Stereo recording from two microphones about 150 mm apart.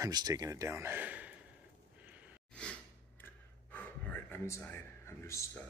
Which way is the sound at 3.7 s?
10° left (ahead or behind).